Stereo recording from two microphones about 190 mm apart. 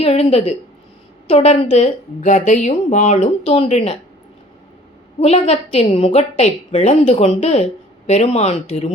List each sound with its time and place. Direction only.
0.0 s a woman's voice: 30° left (ahead or behind)
5.2 s a woman's voice: 35° left (ahead or behind)